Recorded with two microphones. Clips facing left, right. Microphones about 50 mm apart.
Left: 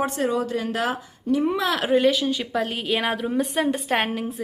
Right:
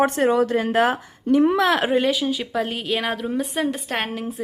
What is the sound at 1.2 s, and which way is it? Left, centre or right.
Speech, right.